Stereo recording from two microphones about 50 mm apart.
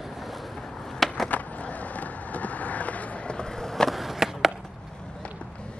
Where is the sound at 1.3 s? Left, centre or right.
Left.